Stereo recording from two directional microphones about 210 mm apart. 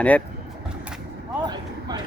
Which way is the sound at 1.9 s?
20° right (ahead or behind).